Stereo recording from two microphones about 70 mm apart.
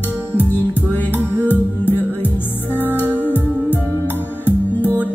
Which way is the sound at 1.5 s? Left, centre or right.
Left.